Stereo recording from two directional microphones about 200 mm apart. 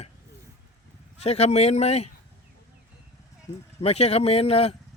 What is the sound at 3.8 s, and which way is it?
Speech, 30° left (ahead or behind).